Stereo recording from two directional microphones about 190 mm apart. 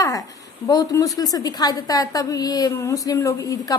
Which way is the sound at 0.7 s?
20° left (ahead or behind).